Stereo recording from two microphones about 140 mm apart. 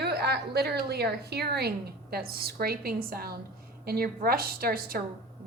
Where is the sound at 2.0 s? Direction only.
90° right.